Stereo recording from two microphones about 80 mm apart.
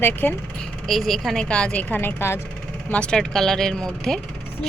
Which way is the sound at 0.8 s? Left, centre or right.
Centre.